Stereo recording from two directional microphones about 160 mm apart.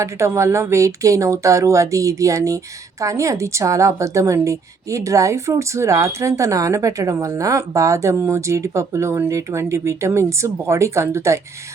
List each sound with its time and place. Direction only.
0.0 s a woman's voice: 15° right (ahead or behind)